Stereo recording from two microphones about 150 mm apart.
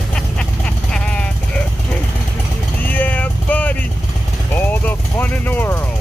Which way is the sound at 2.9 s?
10° left (ahead or behind).